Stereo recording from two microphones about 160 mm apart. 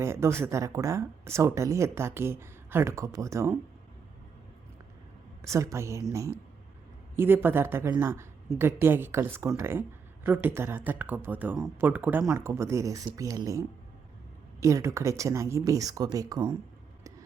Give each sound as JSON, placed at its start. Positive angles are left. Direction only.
{"t": 0.0, "sound": "speech", "side_deg": -15}
{"t": 5.5, "sound": "speech", "side_deg": -20}